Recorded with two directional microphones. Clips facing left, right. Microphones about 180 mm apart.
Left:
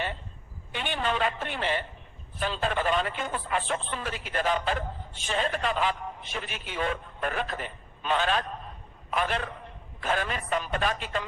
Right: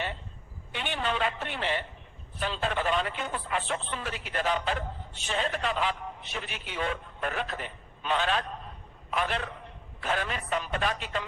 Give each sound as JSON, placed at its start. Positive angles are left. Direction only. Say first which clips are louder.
{"t": 0.7, "sound": "a man's voice", "louder": "left 2 dB", "side_deg": 45}